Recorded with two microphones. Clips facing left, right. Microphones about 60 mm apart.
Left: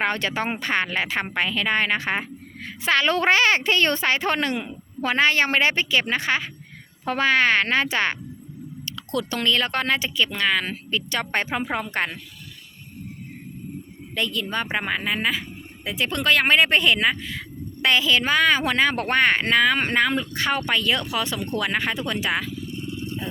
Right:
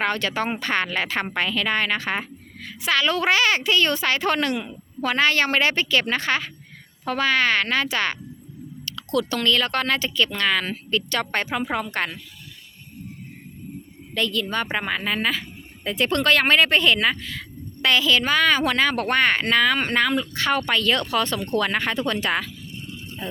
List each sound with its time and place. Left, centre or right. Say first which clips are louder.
0.0 s speech: even; left
7.0 s speech: left 1 dB; left
14.2 s a woman's voice: right 2 dB; centre
16.6 s a woman's voice: even; left